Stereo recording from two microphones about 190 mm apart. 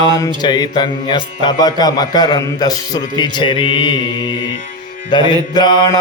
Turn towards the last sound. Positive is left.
turn(degrees=20)  # may be behind; listen again after turning